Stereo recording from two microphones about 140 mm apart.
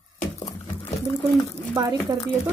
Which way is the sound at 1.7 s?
20° right (ahead or behind).